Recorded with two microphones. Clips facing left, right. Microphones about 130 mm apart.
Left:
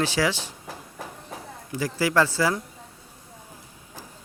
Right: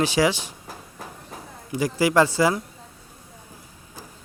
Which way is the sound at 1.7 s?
15° right (ahead or behind).